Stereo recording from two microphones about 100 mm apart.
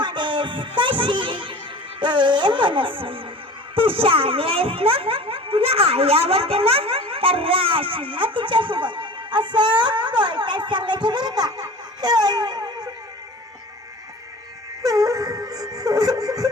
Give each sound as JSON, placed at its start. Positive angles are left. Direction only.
{"t": 0.0, "sound": "music", "side_deg": -50}
{"t": 2.0, "sound": "a child's voice", "side_deg": -50}
{"t": 14.8, "sound": "music", "side_deg": -35}